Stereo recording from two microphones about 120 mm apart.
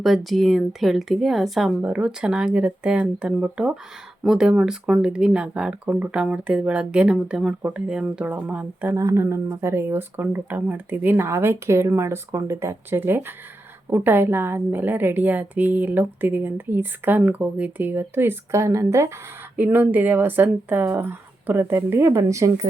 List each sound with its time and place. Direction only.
0.0 s a woman's voice: centre (ahead or behind)
8.9 s a woman's voice: 25° right (ahead or behind)